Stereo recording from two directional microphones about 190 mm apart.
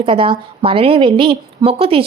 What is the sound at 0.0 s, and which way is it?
A woman's voice, 25° right (ahead or behind).